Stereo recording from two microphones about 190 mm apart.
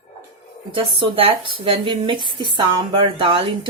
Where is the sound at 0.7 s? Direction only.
30° right (ahead or behind).